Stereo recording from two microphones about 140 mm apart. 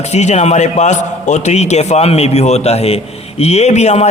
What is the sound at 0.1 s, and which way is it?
A man's voice, 55° left (ahead or behind).